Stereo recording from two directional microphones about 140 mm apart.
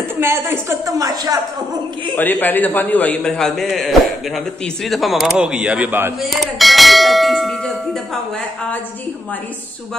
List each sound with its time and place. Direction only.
0.2 s a woman's voice: 15° right (ahead or behind)
2.1 s a man's voice: 15° left (ahead or behind); by 6.1 s 15° right (ahead or behind)
6.2 s clang: centre (ahead or behind)